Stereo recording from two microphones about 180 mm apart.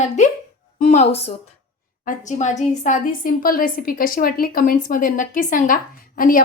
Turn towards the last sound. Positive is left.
turn(degrees=50)  # may be behind; listen again after turning